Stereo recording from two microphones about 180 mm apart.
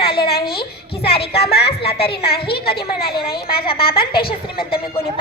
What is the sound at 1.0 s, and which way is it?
A woman's voice, 65° left (ahead or behind).